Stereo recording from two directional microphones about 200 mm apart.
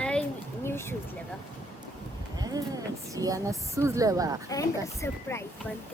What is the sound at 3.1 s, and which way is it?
A woman's voice, 15° right (ahead or behind).